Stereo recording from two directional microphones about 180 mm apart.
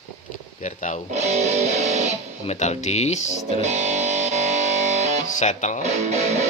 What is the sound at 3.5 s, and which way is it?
Music, 40° right (ahead or behind).